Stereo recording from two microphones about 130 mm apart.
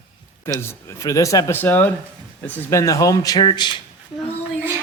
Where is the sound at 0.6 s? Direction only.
20° left (ahead or behind); by 3.8 s 35° left (ahead or behind).